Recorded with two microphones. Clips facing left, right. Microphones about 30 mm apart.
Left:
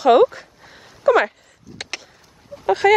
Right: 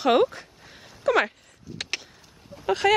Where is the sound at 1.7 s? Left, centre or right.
Centre.